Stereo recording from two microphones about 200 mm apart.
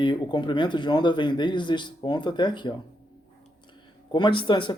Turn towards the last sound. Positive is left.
turn(degrees=25)  # may be behind; listen again after turning